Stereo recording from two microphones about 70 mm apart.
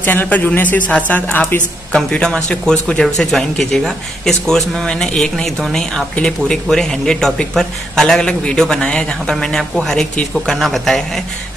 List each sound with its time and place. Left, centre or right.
0.0 s a man's voice: left; by 11.0 s centre